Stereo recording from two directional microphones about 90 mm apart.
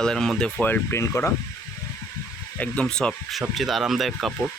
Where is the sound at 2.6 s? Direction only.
10° left (ahead or behind).